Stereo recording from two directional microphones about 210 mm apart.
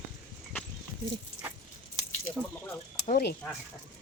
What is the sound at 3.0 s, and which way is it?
Speech, 45° left (ahead or behind).